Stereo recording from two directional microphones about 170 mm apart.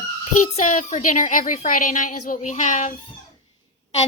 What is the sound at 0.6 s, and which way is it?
A woman's voice, 45° left (ahead or behind).